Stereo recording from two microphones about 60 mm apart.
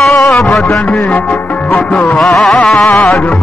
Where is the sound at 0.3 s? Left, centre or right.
Centre.